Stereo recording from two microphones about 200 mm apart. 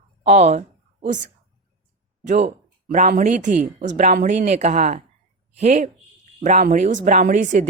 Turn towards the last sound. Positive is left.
turn(degrees=-40)  # may be behind; listen again after turning